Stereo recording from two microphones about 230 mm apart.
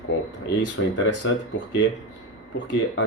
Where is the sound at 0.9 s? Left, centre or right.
Left.